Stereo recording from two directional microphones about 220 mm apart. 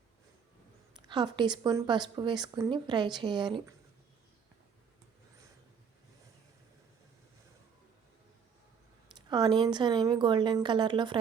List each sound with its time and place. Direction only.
1.0 s speech: 20° right (ahead or behind)
9.1 s speech: 20° right (ahead or behind)